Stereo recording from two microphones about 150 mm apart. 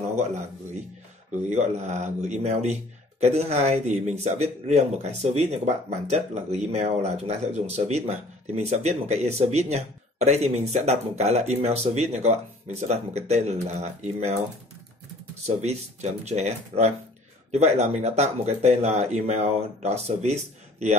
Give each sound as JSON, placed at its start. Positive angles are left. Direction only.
{"t": 1.5, "sound": "speech", "side_deg": -50}
{"t": 15.4, "sound": "speech", "side_deg": -45}